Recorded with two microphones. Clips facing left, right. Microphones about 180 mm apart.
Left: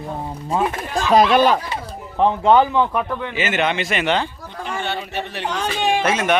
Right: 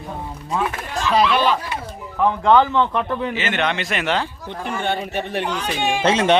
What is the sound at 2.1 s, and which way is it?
A man's voice, 20° left (ahead or behind).